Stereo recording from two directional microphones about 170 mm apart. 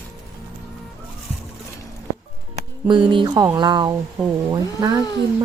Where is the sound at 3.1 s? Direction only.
25° right (ahead or behind).